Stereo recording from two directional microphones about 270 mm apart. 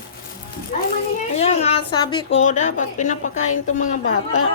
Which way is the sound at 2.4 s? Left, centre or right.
Left.